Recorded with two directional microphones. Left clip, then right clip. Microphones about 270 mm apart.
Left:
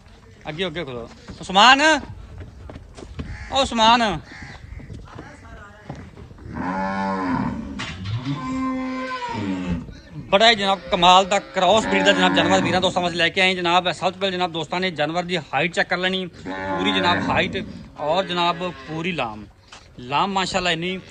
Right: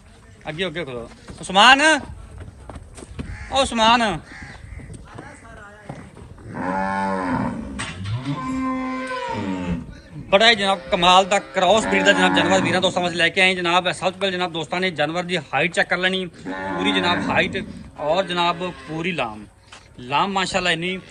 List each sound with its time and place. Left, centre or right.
0.4 s a man's voice: centre
3.2 s a sound: left
3.5 s a man's voice: centre
4.3 s a sound: left
6.5 s livestock: right
8.4 s music: left
8.7 s music: right
10.2 s a man's voice: centre